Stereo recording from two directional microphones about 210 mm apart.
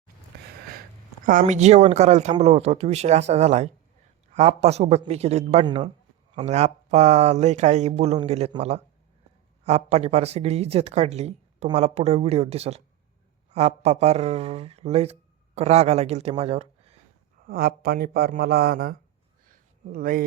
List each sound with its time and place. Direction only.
1.2 s speech: 40° right (ahead or behind)
17.4 s a man's voice: 45° right (ahead or behind)
19.5 s a sound: 40° right (ahead or behind)